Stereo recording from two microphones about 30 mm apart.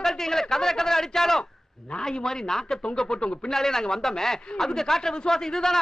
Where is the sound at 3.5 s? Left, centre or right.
Centre.